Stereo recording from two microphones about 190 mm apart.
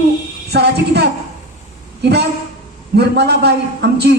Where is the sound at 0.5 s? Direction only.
60° right (ahead or behind).